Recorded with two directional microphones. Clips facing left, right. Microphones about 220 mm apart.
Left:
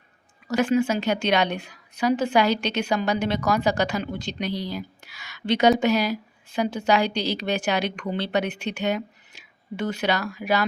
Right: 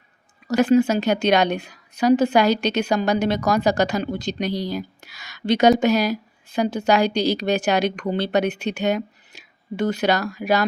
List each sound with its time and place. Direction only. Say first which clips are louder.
0.4 s a woman's voice: right 5 dB; 40° right (ahead or behind)